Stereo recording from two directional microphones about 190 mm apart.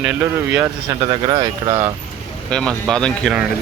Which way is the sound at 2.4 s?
5° left (ahead or behind).